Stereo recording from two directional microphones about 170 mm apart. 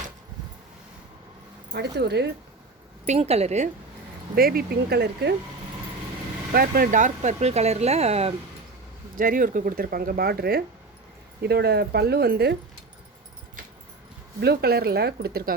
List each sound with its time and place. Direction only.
1.7 s speech: 80° right
3.1 s speech: 40° right (ahead or behind)
4.4 s speech: 60° right (ahead or behind)
6.5 s speech: 60° right (ahead or behind); by 8.3 s 40° right (ahead or behind)
9.1 s speech: 55° right (ahead or behind); by 12.5 s 70° right (ahead or behind)
14.4 s speech: 70° right (ahead or behind)